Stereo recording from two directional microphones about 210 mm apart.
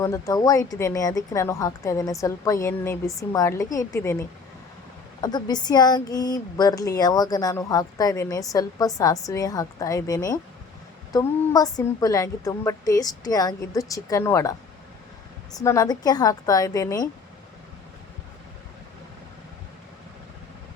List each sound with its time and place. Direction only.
0.0 s speech: 15° left (ahead or behind)
15.5 s speech: 15° left (ahead or behind)